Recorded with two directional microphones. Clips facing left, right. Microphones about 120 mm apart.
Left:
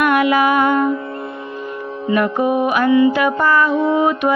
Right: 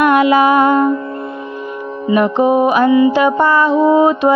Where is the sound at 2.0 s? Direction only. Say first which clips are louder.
Right 4 dB; 20° right (ahead or behind).